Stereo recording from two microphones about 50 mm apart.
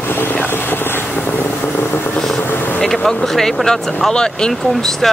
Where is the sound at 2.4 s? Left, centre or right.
Left.